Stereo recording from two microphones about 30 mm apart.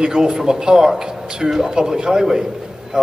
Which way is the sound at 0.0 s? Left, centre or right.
Right.